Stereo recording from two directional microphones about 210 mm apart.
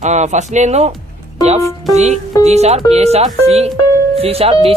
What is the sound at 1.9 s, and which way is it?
Speech, 30° right (ahead or behind).